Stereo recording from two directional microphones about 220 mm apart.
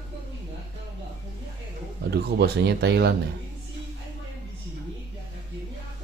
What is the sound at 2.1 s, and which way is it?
Speech, 50° right (ahead or behind).